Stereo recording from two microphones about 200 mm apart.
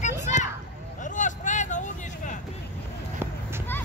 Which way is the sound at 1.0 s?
40° left (ahead or behind).